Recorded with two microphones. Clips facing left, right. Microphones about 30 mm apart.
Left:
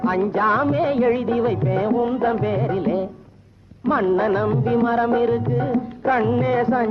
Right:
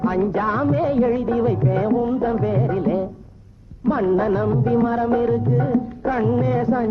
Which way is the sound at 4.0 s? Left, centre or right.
Left.